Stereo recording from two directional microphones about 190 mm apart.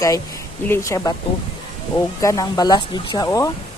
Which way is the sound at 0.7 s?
15° left (ahead or behind).